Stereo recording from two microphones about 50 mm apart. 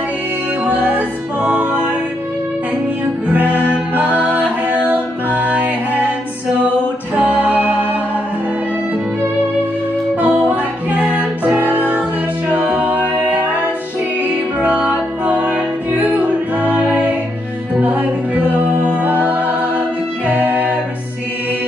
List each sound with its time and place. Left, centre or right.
0.7 s music: right
3.3 s music: right
7.2 s music: right
10.2 s music: right